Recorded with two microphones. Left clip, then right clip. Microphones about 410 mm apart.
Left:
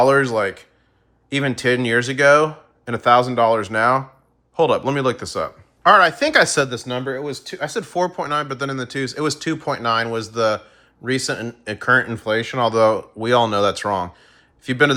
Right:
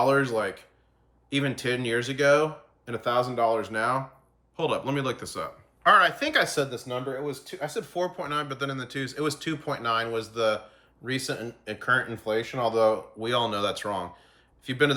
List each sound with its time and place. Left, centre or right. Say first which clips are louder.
0.0 s speech: left 8 dB; centre